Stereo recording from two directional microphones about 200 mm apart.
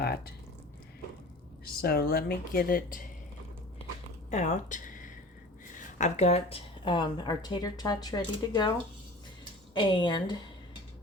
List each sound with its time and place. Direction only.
1.6 s speech: 50° left (ahead or behind)
4.3 s speech: 35° left (ahead or behind); by 8.7 s 20° left (ahead or behind)
9.7 s speech: 25° left (ahead or behind)